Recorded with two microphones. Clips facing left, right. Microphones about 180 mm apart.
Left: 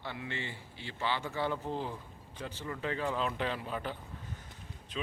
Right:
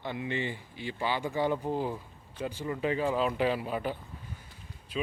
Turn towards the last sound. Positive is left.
turn(degrees=-10)  # may be behind; listen again after turning